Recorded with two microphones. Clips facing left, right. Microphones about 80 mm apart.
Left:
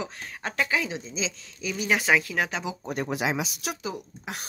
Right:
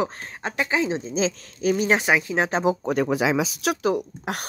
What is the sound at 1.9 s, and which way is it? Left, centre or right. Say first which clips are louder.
Speech: right 3 dB; centre.